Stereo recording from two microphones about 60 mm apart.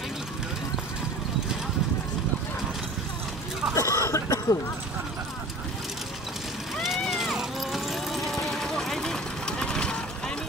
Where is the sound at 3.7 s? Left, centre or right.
Left.